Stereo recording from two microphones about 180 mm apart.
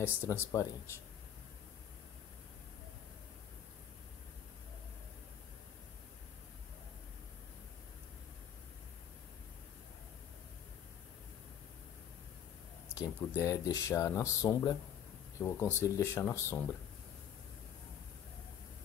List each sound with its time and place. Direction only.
0.0 s speech: 15° left (ahead or behind)
13.4 s speech: 20° left (ahead or behind)